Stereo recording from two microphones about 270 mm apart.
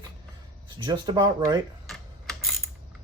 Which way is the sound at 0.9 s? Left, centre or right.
Centre.